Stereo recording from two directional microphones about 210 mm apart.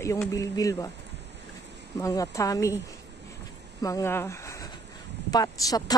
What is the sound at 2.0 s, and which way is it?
Speech, 15° left (ahead or behind).